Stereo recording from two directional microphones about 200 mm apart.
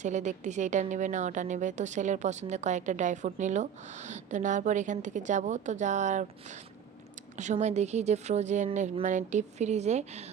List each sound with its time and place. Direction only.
0.0 s a woman's voice: 35° right (ahead or behind)
7.3 s a woman's voice: 35° right (ahead or behind)